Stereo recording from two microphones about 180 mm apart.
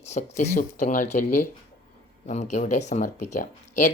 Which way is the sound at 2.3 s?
40° left (ahead or behind).